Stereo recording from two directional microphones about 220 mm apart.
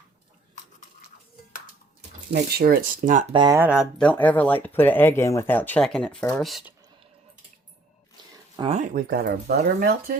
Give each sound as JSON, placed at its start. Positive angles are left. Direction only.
{"t": 2.3, "sound": "speech", "side_deg": -45}
{"t": 3.3, "sound": "speech", "side_deg": -20}
{"t": 3.6, "sound": "speech", "side_deg": -5}
{"t": 8.5, "sound": "speech", "side_deg": -25}